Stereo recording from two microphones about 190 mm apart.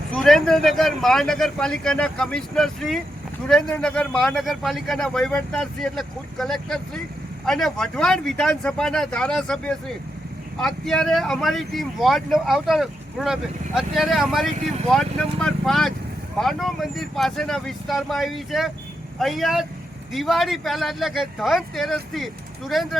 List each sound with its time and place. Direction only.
0.1 s speech: 5° left (ahead or behind)